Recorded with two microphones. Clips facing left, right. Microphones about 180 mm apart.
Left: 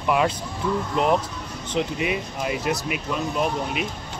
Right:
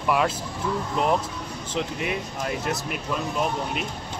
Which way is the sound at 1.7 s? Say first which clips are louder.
Left 4 dB; 5° left (ahead or behind).